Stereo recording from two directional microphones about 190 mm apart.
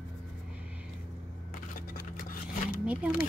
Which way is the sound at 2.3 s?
50° left (ahead or behind).